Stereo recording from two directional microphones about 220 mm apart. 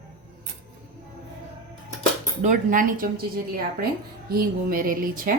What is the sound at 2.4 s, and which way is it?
Speech, 35° right (ahead or behind).